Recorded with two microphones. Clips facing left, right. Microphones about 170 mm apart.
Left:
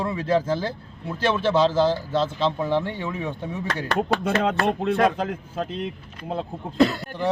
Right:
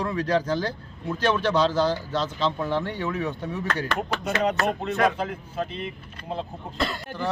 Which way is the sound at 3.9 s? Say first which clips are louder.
Left 9 dB; 30° left (ahead or behind).